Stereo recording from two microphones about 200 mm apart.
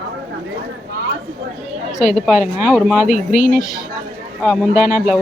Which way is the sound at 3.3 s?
40° left (ahead or behind).